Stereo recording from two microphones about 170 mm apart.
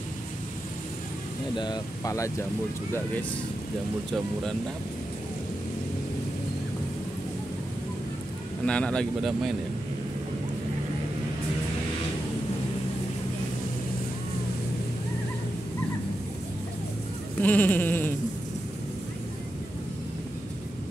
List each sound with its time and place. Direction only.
1.6 s speech: 20° left (ahead or behind)
8.6 s speech: 5° left (ahead or behind)
17.4 s sheep: 10° left (ahead or behind)